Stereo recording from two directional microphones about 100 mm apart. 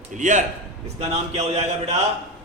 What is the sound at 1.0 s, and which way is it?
Speech, 90° right.